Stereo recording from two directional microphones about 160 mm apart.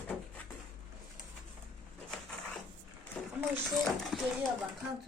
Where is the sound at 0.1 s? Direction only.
10° left (ahead or behind).